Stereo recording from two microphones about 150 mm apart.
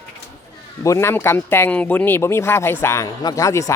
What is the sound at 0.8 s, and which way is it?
Speech, 20° left (ahead or behind).